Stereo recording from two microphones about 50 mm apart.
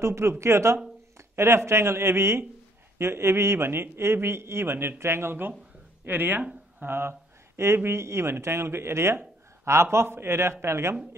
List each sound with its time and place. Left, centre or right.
0.0 s speech: right
6.0 s speech: right
6.8 s speech: right